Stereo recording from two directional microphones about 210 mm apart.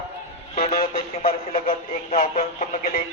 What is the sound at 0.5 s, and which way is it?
Speech, 30° left (ahead or behind).